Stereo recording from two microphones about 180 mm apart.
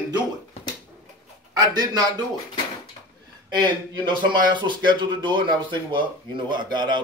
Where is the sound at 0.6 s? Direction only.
35° left (ahead or behind).